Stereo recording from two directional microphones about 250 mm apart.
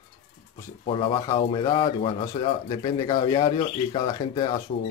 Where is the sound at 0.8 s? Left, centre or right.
Left.